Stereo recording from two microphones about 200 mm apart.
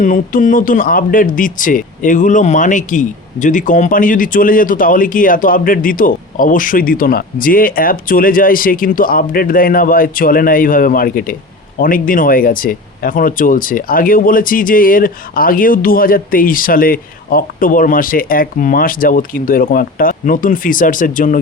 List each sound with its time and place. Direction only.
0.0 s speech: 40° left (ahead or behind)